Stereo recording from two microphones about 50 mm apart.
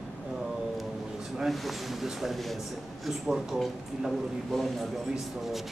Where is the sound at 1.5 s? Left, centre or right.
Centre.